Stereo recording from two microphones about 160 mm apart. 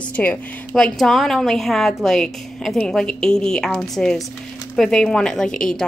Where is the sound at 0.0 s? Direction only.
10° left (ahead or behind).